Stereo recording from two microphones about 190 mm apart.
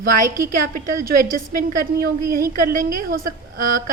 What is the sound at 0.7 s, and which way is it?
A woman's voice, 50° right (ahead or behind).